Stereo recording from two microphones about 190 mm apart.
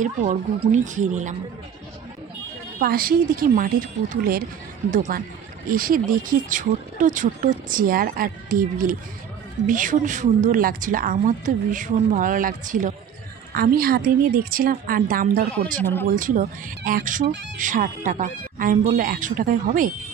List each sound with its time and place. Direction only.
0.0 s speech: 40° right (ahead or behind)
2.8 s speech: 50° right (ahead or behind)
15.8 s speech: 10° left (ahead or behind)
16.1 s speech: 45° right (ahead or behind)